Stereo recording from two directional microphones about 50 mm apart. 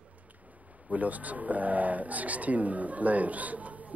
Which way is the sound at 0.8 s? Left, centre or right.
Right.